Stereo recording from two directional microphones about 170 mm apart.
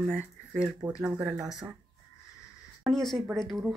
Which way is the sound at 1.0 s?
5° right (ahead or behind).